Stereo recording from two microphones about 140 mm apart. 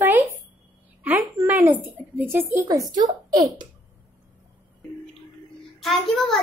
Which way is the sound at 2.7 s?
25° right (ahead or behind).